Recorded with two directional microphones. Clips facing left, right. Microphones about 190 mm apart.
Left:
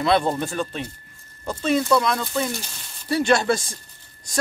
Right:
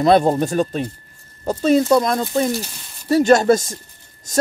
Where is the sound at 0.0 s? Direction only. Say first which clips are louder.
Right 6 dB; 40° right (ahead or behind).